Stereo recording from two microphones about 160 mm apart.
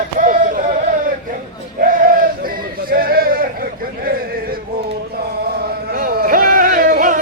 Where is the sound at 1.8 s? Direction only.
60° right (ahead or behind).